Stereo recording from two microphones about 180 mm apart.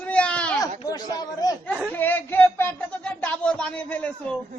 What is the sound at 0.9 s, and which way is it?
A man's voice, 20° left (ahead or behind).